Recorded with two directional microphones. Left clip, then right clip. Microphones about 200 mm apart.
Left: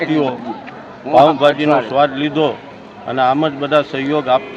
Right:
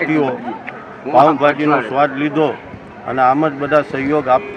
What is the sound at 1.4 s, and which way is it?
A man's voice, 15° left (ahead or behind).